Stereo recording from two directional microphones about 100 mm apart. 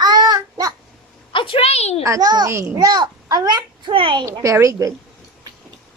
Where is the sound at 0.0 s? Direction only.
45° right (ahead or behind).